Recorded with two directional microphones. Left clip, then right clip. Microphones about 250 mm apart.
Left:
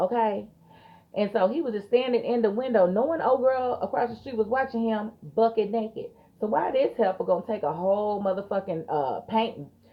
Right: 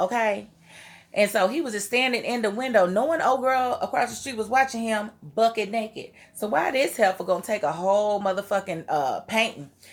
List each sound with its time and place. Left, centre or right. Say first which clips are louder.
0.0 s a woman's voice: right 1 dB; centre